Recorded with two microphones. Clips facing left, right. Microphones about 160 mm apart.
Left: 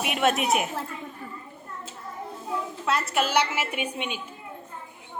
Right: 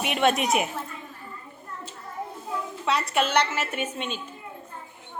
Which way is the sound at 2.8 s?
Centre (ahead or behind).